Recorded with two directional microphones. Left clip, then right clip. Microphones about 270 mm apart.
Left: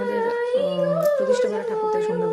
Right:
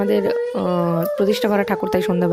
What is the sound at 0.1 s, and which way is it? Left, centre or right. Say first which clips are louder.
Speech: right 3 dB; right.